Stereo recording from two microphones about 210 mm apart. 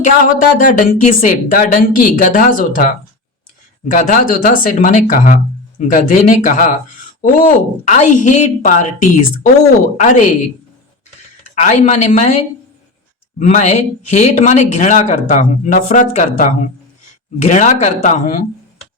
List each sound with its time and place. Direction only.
0.6 s speech: 40° left (ahead or behind)
3.9 s speech: 35° left (ahead or behind)
11.5 s speech: 35° left (ahead or behind)
13.4 s speech: 35° left (ahead or behind)